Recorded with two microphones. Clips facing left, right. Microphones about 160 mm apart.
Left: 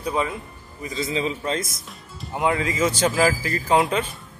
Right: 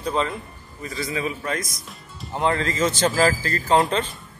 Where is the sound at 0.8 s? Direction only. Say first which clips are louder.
Left 2 dB; 20° left (ahead or behind).